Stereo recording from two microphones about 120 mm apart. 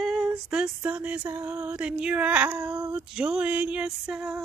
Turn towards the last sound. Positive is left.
turn(degrees=-5)  # may be behind; listen again after turning